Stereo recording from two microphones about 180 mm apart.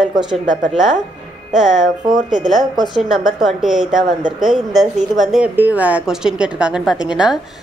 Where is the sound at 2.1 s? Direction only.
45° right (ahead or behind).